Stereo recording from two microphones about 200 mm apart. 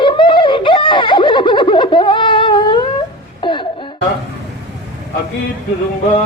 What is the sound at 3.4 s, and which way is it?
Wail, 25° left (ahead or behind).